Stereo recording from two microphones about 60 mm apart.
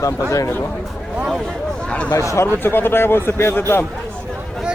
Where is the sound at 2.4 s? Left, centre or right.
Left.